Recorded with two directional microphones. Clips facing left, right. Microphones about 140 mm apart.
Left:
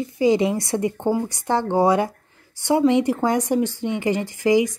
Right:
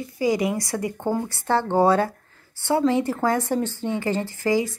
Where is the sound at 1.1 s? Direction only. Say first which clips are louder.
Right 2 dB; 15° left (ahead or behind).